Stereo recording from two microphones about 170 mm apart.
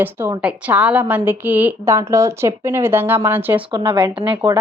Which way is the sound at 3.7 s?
25° right (ahead or behind).